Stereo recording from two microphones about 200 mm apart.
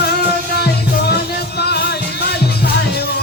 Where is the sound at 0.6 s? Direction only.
55° left (ahead or behind).